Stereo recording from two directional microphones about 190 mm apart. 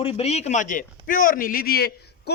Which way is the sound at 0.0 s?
30° left (ahead or behind).